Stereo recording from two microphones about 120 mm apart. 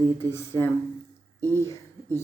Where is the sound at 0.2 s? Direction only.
20° left (ahead or behind).